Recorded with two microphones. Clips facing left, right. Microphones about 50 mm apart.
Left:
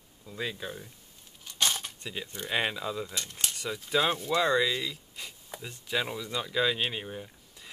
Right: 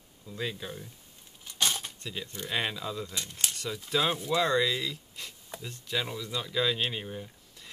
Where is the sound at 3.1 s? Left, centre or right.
Centre.